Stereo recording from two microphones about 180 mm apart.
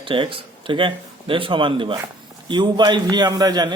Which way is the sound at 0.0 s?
30° right (ahead or behind).